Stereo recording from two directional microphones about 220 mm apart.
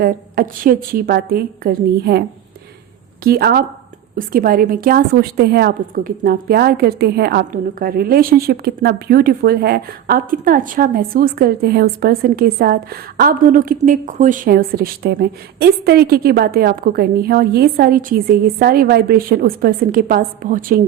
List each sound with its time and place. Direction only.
0.0 s a woman's voice: 40° right (ahead or behind)
3.2 s a woman's voice: 45° right (ahead or behind)